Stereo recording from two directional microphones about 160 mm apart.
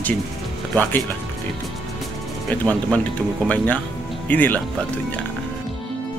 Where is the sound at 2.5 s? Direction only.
10° left (ahead or behind).